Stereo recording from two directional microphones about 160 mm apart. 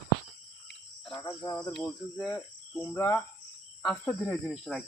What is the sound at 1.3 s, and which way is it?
Cricket, 25° left (ahead or behind).